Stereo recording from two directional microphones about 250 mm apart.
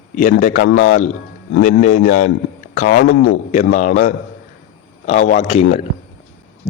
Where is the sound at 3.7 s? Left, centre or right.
Left.